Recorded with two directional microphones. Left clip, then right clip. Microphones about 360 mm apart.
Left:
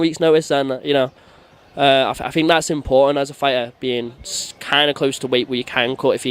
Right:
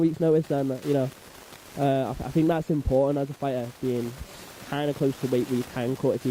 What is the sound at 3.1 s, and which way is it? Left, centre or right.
Speech, centre.